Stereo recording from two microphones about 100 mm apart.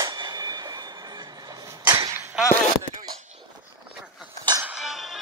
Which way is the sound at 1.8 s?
40° right (ahead or behind).